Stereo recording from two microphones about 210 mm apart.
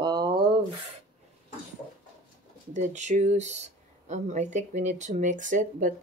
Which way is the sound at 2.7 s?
35° right (ahead or behind).